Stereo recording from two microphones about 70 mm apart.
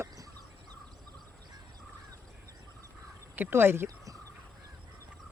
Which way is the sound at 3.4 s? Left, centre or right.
Right.